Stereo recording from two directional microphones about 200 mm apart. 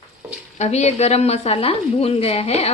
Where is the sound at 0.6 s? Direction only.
35° left (ahead or behind).